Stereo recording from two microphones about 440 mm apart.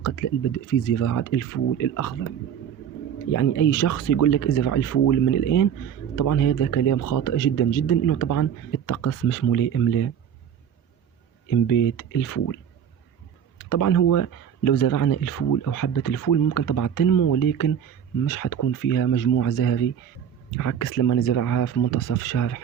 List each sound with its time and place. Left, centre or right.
0.7 s speech: left
3.3 s speech: left
11.4 s speech: left
13.7 s speech: left